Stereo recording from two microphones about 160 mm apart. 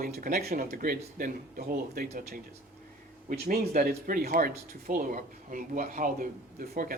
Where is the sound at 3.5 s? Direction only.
65° right (ahead or behind).